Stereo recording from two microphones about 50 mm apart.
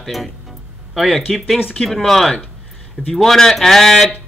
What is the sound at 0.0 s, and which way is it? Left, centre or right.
Speech, centre.